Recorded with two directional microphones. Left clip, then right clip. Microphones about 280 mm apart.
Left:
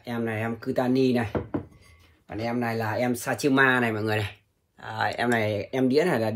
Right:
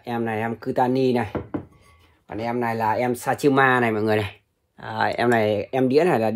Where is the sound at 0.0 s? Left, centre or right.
Right.